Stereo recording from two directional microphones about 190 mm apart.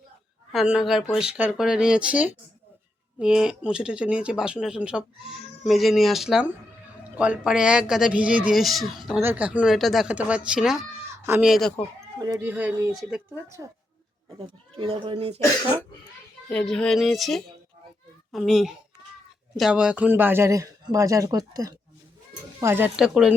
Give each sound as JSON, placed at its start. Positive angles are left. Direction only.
{"t": 0.5, "sound": "speech", "side_deg": 0}
{"t": 12.2, "sound": "speech", "side_deg": -15}
{"t": 14.3, "sound": "speech", "side_deg": -30}
{"t": 16.5, "sound": "a child's voice", "side_deg": 5}